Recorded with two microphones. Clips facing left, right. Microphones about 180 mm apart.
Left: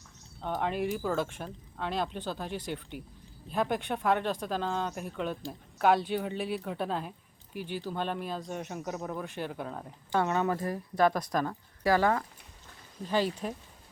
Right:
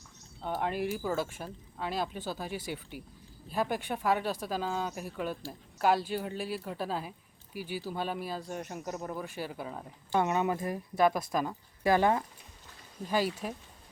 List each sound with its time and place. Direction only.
0.4 s speech: 5° right (ahead or behind)
10.2 s speech: 15° right (ahead or behind)
11.8 s speech: 20° right (ahead or behind)
13.1 s speech: 10° right (ahead or behind)